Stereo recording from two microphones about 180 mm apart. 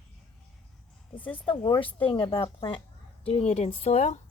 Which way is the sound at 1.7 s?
30° left (ahead or behind).